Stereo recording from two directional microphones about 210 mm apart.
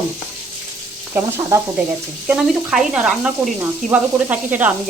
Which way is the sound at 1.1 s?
15° right (ahead or behind).